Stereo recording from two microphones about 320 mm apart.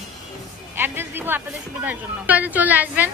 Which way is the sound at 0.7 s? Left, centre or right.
Centre.